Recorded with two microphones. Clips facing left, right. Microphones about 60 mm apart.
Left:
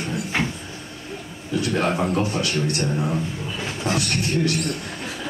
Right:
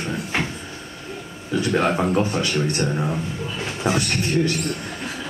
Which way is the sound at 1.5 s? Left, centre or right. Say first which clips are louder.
Right 2 dB; right.